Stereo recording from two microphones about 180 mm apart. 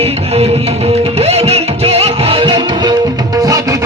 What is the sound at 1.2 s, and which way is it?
Music, 35° right (ahead or behind).